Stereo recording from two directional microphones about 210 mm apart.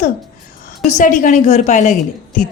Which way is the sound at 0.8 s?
35° left (ahead or behind).